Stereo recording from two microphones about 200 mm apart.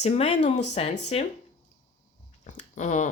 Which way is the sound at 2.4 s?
35° left (ahead or behind).